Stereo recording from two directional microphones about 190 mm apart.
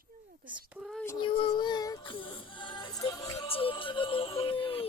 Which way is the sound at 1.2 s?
25° left (ahead or behind).